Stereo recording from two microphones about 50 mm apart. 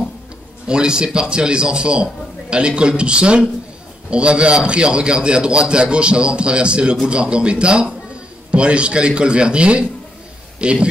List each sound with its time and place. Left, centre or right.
0.7 s a man's voice: centre